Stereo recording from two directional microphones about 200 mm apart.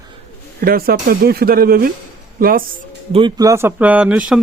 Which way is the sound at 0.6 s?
50° right (ahead or behind).